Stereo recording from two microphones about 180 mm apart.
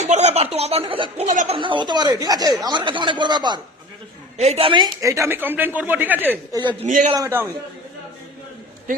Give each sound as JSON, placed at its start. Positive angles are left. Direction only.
{"t": 0.0, "sound": "speech", "side_deg": -40}
{"t": 1.2, "sound": "speech", "side_deg": -40}
{"t": 1.5, "sound": "speech", "side_deg": -25}
{"t": 4.4, "sound": "a woman's voice", "side_deg": -35}
{"t": 6.8, "sound": "a man's voice", "side_deg": -45}
{"t": 7.1, "sound": "a woman's voice", "side_deg": -15}